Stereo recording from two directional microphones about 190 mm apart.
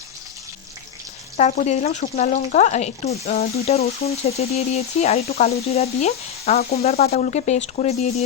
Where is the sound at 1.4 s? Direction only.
35° left (ahead or behind).